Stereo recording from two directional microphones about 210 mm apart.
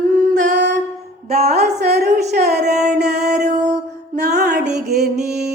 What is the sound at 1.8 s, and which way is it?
Music, 50° right (ahead or behind).